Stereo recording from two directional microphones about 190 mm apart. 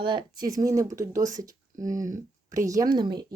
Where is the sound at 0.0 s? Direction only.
25° right (ahead or behind).